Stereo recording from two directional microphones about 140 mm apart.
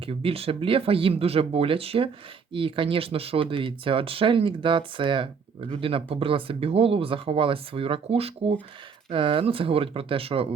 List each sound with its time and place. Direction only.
0.0 s speech: 40° right (ahead or behind)